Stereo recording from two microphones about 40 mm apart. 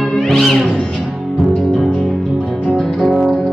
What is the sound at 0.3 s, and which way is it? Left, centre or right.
Cat, centre.